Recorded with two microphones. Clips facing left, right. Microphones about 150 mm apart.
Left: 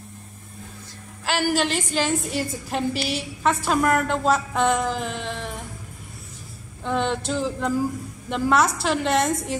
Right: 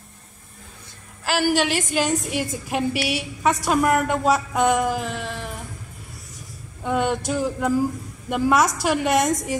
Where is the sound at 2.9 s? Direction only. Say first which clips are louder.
Right 2 dB; 60° right (ahead or behind).